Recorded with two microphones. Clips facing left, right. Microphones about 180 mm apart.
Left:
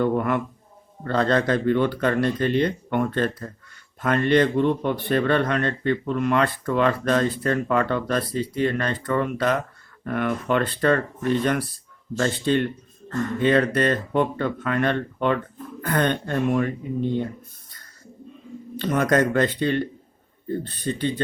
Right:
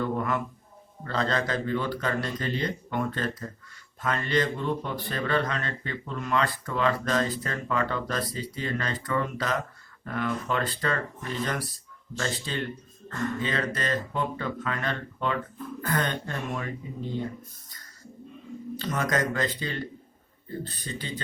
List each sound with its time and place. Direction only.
0.0 s a sound: 60° left (ahead or behind)
1.0 s speech: 55° left (ahead or behind)
13.4 s speech: 60° left (ahead or behind)
18.8 s speech: 60° left (ahead or behind)